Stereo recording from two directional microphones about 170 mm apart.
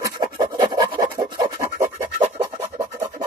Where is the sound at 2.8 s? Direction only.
20° right (ahead or behind).